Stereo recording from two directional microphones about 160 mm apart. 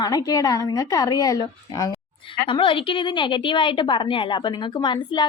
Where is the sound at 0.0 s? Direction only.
25° left (ahead or behind).